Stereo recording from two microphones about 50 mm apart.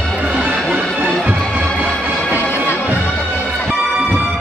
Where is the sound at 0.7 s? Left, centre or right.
Centre.